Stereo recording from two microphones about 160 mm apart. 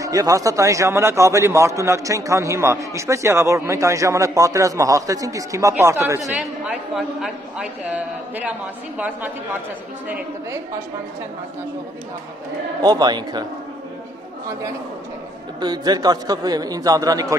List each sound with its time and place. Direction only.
0.0 s a man's voice: 20° right (ahead or behind)
6.3 s a man's voice: 5° right (ahead or behind)
12.8 s a man's voice: 25° right (ahead or behind)
15.6 s a man's voice: 25° right (ahead or behind)